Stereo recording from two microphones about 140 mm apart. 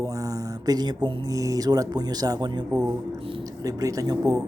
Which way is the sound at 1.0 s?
30° right (ahead or behind).